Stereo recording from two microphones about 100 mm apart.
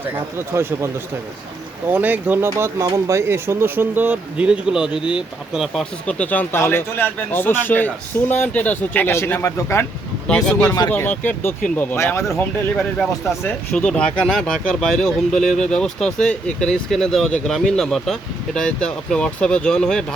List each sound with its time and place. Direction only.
0.3 s speech: 25° right (ahead or behind)
1.9 s speech: 20° right (ahead or behind)
5.8 s speech: 10° left (ahead or behind); by 9.8 s 25° left (ahead or behind)
10.2 s speech: 10° left (ahead or behind)
10.8 s speech: 20° left (ahead or behind)
13.7 s speech: 10° left (ahead or behind)